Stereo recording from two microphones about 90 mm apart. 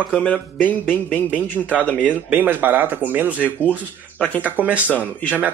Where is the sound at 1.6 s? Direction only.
15° right (ahead or behind).